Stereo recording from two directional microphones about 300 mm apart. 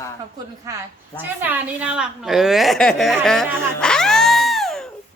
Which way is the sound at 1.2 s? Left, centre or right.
Centre.